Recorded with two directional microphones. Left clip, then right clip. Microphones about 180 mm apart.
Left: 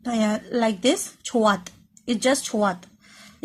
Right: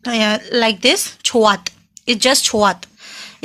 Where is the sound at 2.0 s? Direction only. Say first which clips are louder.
Right 8 dB; 25° right (ahead or behind).